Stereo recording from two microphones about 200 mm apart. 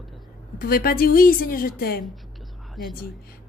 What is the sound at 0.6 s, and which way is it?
Speech, 45° left (ahead or behind).